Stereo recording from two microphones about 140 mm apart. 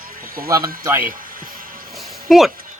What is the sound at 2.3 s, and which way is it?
Speech, centre (ahead or behind).